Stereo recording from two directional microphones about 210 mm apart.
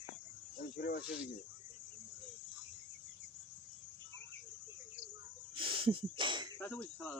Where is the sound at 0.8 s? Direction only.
50° left (ahead or behind).